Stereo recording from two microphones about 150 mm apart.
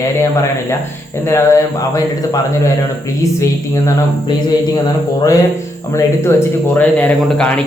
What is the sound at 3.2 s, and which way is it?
Mantra, 20° left (ahead or behind).